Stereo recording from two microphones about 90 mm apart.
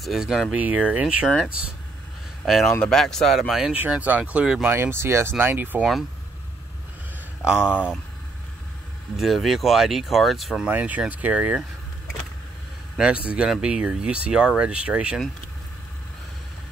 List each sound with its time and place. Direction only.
0.0 s speech: centre (ahead or behind)
0.6 s speech: 15° right (ahead or behind)
2.4 s speech: centre (ahead or behind)
4.6 s speech: 25° right (ahead or behind)
7.6 s speech: 20° left (ahead or behind)
9.1 s speech: 5° right (ahead or behind)
10.7 s speech: 15° right (ahead or behind)
12.9 s speech: 10° right (ahead or behind)